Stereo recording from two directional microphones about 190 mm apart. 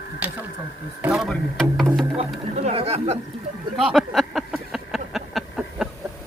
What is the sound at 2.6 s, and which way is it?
Speech, 35° right (ahead or behind).